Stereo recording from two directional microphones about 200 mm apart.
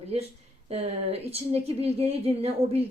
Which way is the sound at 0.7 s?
30° right (ahead or behind).